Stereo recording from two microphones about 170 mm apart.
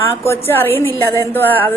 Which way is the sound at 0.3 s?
15° left (ahead or behind).